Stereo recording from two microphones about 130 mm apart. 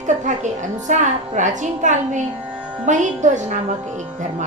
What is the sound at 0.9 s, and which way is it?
A woman's voice, 70° right (ahead or behind).